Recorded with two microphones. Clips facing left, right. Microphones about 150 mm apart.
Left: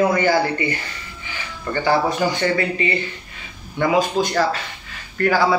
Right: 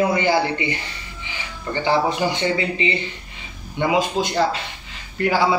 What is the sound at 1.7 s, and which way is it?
A man's voice, 20° right (ahead or behind).